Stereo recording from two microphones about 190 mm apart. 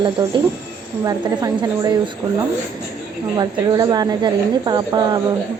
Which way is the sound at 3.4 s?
20° right (ahead or behind).